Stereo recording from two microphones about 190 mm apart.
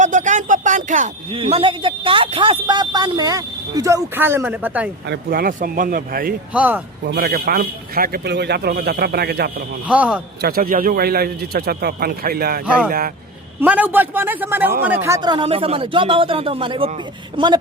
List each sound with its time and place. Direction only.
0.0 s a sound: 40° right (ahead or behind)
1.4 s speech: 30° right (ahead or behind); by 4.9 s 10° right (ahead or behind)
5.0 s speech: 50° right (ahead or behind)
6.5 s a man's voice: 10° right (ahead or behind)
7.0 s a man's voice: 60° right (ahead or behind)
9.9 s a man's voice: 5° right (ahead or behind)
10.4 s speech: 50° right (ahead or behind)
13.6 s a man's voice: 10° right (ahead or behind); by 17.6 s 25° right (ahead or behind)